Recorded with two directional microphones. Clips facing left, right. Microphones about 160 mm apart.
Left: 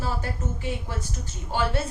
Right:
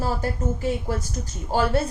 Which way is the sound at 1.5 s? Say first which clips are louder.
Right 4 dB; 40° right (ahead or behind).